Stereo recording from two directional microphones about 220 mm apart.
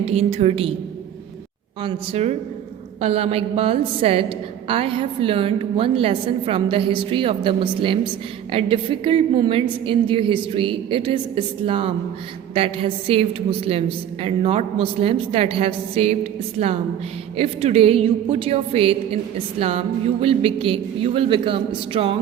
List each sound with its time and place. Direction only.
0.1 s a woman's voice: 30° right (ahead or behind)
1.8 s a woman's voice: 30° right (ahead or behind)